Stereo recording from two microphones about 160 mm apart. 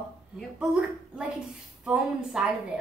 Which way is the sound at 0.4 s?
Centre (ahead or behind).